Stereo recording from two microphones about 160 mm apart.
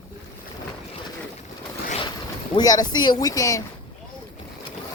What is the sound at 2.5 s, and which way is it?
A woman's voice, 25° left (ahead or behind).